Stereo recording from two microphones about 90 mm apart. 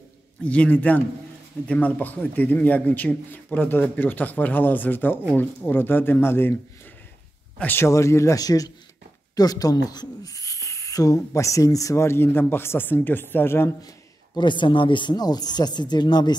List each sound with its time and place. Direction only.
0.5 s a man's voice: 15° left (ahead or behind)
7.5 s speech: 20° left (ahead or behind)
7.8 s speech: 30° left (ahead or behind)
14.4 s speech: 60° left (ahead or behind)